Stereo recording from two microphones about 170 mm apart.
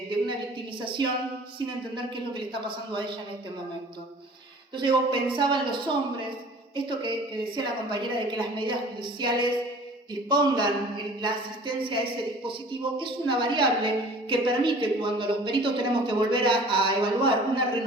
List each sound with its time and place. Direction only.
0.8 s a woman's voice: 30° right (ahead or behind)
4.8 s a woman's voice: 30° right (ahead or behind)